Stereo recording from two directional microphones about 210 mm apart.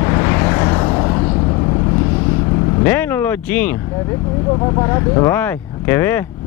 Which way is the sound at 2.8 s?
10° left (ahead or behind).